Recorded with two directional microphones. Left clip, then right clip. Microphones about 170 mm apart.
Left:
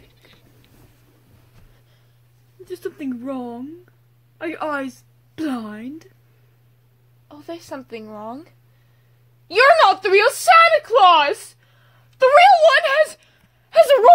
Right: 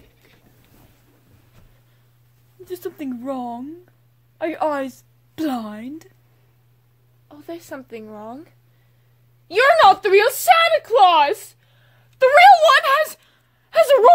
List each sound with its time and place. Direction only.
2.6 s a woman's voice: 20° right (ahead or behind)
7.2 s speech: 20° left (ahead or behind)
12.3 s a sound: 5° right (ahead or behind)